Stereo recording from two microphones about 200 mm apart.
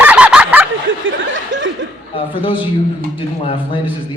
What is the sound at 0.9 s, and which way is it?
Snicker, 70° right (ahead or behind).